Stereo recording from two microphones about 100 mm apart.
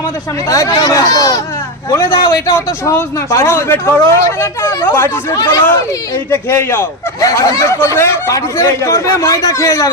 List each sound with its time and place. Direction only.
0.4 s speech: 35° left (ahead or behind)
6.3 s speech: 25° left (ahead or behind)